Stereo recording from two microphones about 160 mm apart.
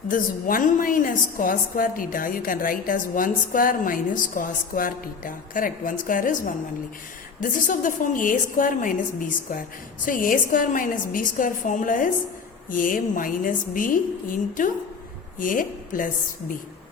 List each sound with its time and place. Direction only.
0.1 s a woman's voice: 60° left (ahead or behind)